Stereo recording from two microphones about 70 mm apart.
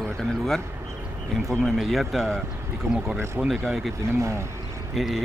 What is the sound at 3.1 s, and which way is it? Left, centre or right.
Speech, right.